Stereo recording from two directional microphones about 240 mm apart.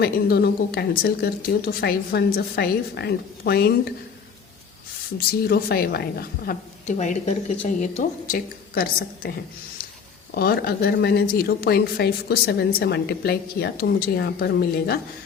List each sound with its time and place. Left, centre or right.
0.0 s speech: left
5.1 s speech: left
10.3 s speech: left